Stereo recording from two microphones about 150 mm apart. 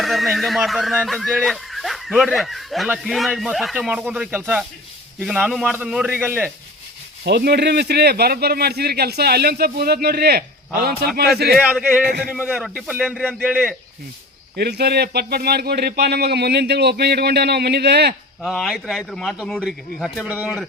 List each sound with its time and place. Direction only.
0.0 s speech: centre (ahead or behind)
7.4 s speech: 90° right
12.3 s speech: 5° right (ahead or behind)
14.5 s speech: 90° right
18.4 s speech: centre (ahead or behind)
20.2 s speech: 10° right (ahead or behind)